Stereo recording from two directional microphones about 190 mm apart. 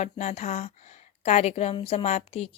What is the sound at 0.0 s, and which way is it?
Speech, 35° left (ahead or behind).